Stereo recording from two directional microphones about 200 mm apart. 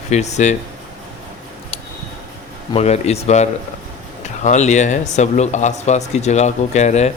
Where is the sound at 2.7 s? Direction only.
30° left (ahead or behind).